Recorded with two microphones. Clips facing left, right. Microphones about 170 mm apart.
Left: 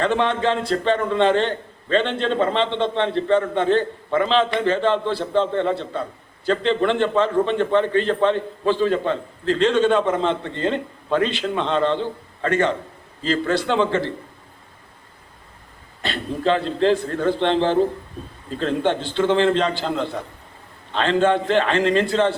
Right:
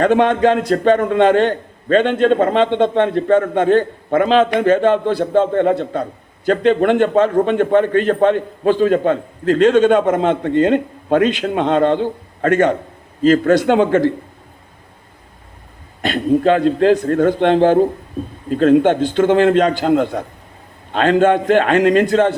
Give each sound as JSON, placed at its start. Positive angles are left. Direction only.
{"t": 0.0, "sound": "a man's voice", "side_deg": -45}
{"t": 16.0, "sound": "a man's voice", "side_deg": -50}